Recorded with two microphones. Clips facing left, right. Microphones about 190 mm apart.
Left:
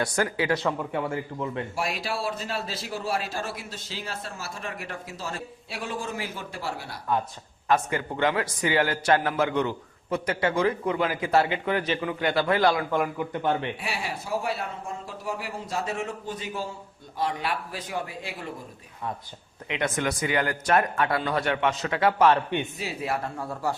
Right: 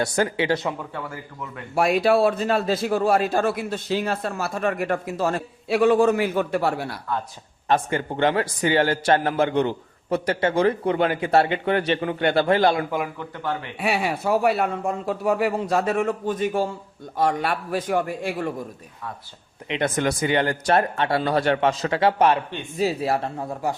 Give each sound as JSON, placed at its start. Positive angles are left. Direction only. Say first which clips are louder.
{"t": 0.0, "sound": "a man's voice", "louder": "right 4 dB", "side_deg": -25}
{"t": 0.9, "sound": "speech", "louder": "left 5 dB", "side_deg": 25}
{"t": 1.7, "sound": "a man's voice", "louder": "right 12 dB", "side_deg": -60}
{"t": 7.7, "sound": "a man's voice", "louder": "right 3 dB", "side_deg": -25}
{"t": 11.2, "sound": "a man's voice", "louder": "right 4 dB", "side_deg": -65}
{"t": 12.2, "sound": "a man's voice", "louder": "right 5 dB", "side_deg": -60}
{"t": 12.5, "sound": "a man's voice", "louder": "right 2 dB", "side_deg": -30}
{"t": 13.1, "sound": "speech", "louder": "left 3 dB", "side_deg": 20}
{"t": 13.7, "sound": "a man's voice", "louder": "right 9 dB", "side_deg": -65}
{"t": 19.6, "sound": "speech", "louder": "right 4 dB", "side_deg": -30}
{"t": 23.4, "sound": "a man's voice", "louder": "right 3 dB", "side_deg": -15}